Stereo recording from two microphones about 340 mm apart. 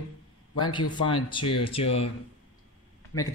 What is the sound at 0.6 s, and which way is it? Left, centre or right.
Speech, centre.